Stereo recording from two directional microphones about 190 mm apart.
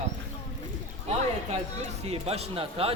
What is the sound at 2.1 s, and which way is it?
Speech, 30° right (ahead or behind).